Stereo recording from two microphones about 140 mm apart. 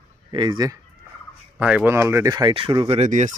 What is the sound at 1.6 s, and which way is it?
Speech, 10° right (ahead or behind).